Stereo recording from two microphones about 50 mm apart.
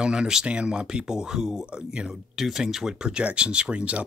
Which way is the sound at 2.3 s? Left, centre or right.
Centre.